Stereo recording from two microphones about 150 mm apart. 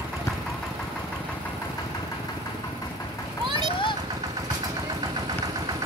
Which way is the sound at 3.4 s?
30° right (ahead or behind).